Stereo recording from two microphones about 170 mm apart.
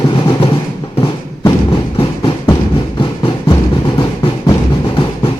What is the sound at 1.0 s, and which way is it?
Thump, 25° left (ahead or behind).